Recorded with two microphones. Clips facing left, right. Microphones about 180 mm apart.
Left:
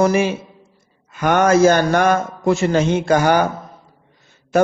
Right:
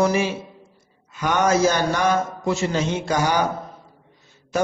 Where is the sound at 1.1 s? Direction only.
55° left (ahead or behind).